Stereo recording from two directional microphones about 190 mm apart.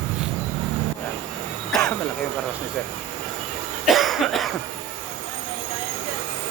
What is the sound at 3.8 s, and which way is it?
Cough, centre (ahead or behind).